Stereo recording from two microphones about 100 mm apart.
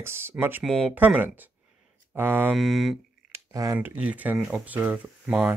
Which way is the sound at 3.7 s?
20° right (ahead or behind).